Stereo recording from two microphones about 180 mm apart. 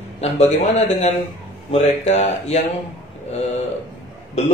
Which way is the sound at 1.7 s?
40° left (ahead or behind).